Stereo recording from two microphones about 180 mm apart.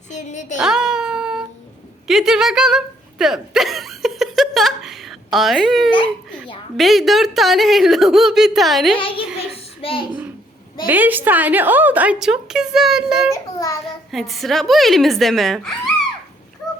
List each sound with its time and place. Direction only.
0.1 s a sound: 40° left (ahead or behind)
0.6 s child singing: 5° right (ahead or behind)
2.0 s speech: centre (ahead or behind)
9.0 s a child's voice: 30° left (ahead or behind)
10.8 s a woman's voice: 10° right (ahead or behind)
13.3 s a child's voice: 20° left (ahead or behind)
14.1 s speech: centre (ahead or behind)